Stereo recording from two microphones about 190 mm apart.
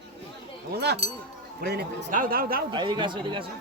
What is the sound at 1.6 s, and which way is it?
Speech, 55° right (ahead or behind).